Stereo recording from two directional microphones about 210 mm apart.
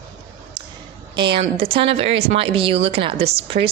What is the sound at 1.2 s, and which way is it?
Speech, 25° right (ahead or behind).